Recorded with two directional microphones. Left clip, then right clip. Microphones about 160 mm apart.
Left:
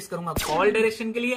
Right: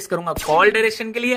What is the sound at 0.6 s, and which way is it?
Speech, 75° right (ahead or behind).